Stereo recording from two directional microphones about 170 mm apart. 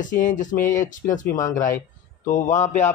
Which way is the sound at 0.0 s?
50° left (ahead or behind).